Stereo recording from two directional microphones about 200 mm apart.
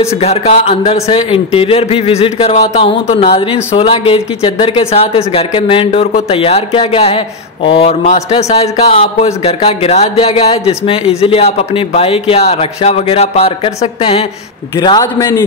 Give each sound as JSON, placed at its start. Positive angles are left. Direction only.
{"t": 0.2, "sound": "speech", "side_deg": 30}
{"t": 14.8, "sound": "a man's voice", "side_deg": 20}